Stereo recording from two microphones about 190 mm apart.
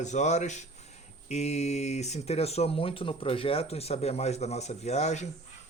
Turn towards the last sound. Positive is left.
turn(degrees=35)  # may be behind; listen again after turning